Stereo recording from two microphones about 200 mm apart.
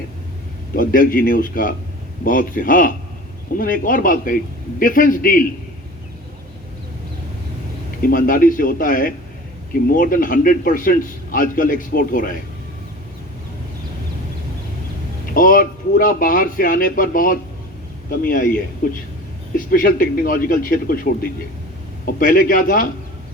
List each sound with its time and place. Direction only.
0.8 s a man's voice: 45° left (ahead or behind)
8.0 s a man's voice: 45° left (ahead or behind)
15.3 s a man's voice: 45° left (ahead or behind)